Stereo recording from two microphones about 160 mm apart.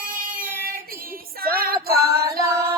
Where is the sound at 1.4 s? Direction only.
70° right (ahead or behind).